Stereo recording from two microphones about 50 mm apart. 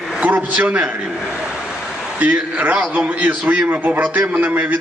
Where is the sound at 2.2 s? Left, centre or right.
Right.